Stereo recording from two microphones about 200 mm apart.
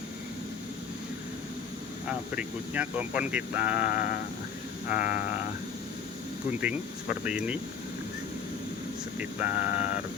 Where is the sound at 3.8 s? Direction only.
45° left (ahead or behind).